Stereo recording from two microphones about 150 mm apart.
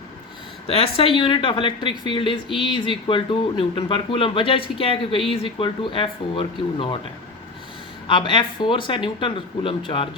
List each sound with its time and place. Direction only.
0.7 s speech: 40° left (ahead or behind)
8.0 s speech: 35° left (ahead or behind)